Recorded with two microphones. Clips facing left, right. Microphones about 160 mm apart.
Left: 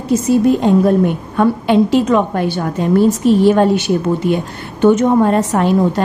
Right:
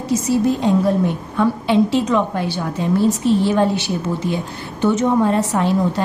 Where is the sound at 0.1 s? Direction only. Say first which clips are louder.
Left 5 dB; 55° left (ahead or behind).